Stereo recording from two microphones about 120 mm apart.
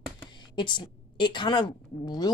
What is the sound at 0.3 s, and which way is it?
A woman's voice, 40° left (ahead or behind).